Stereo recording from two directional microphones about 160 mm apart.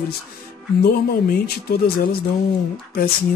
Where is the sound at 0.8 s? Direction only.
75° left (ahead or behind).